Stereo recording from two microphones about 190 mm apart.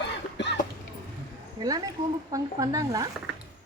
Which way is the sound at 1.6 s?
20° right (ahead or behind).